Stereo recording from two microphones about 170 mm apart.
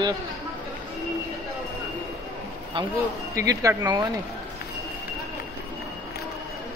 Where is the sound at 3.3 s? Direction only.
20° right (ahead or behind).